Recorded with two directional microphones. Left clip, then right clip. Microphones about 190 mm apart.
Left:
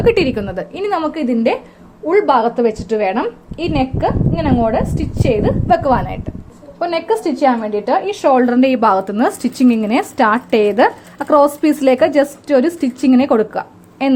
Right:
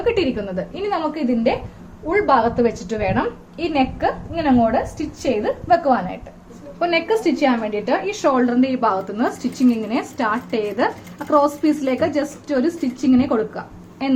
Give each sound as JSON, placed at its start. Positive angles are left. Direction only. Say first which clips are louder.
{"t": 0.0, "sound": "a woman's voice", "louder": "left 6 dB", "side_deg": 45}
{"t": 6.7, "sound": "a woman's voice", "louder": "left 2 dB", "side_deg": 25}